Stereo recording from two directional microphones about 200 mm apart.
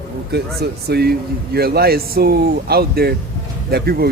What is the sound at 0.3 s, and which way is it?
A man's voice, 55° right (ahead or behind).